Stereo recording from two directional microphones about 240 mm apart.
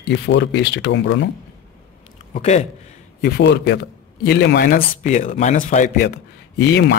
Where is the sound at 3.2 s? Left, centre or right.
Left.